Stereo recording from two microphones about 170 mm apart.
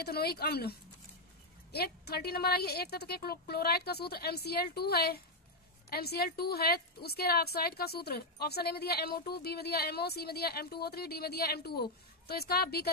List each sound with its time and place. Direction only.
0.0 s a woman's voice: 65° left (ahead or behind)